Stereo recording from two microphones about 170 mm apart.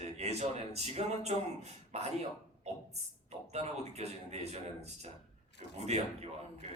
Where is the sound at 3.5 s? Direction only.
40° right (ahead or behind).